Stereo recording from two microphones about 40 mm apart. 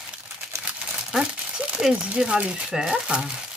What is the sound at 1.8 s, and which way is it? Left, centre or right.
Speech, centre.